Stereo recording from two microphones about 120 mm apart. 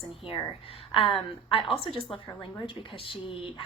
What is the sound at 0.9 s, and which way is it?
A woman's voice, 50° left (ahead or behind).